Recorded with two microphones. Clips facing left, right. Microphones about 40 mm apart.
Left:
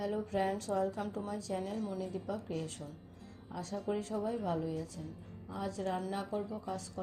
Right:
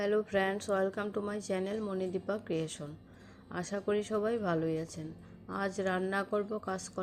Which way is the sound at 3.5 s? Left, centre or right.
Right.